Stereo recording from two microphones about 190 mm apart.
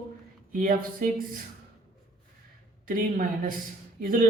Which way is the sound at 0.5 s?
50° right (ahead or behind).